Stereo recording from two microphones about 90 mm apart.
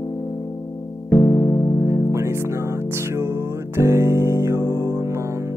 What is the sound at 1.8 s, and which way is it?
Music, 35° right (ahead or behind).